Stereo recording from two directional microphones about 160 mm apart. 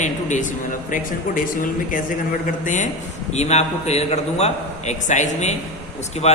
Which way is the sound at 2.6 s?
50° left (ahead or behind).